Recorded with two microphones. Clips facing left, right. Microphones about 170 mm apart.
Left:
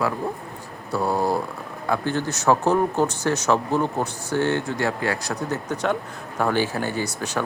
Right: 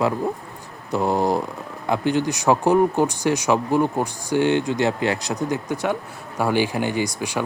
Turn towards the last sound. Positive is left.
turn(degrees=-10)  # may be behind; listen again after turning